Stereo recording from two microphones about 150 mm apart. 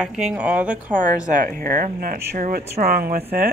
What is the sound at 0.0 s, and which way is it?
Speech, 5° right (ahead or behind).